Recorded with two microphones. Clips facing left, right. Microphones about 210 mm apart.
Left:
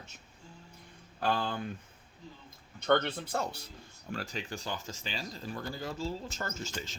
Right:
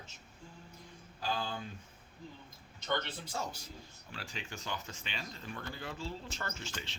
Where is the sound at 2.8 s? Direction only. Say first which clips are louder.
Left 9 dB; 60° left (ahead or behind).